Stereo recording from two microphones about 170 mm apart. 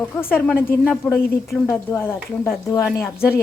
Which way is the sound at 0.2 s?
10° left (ahead or behind).